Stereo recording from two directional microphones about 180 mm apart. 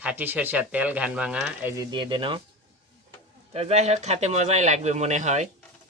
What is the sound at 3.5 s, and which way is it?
Speech, 35° right (ahead or behind).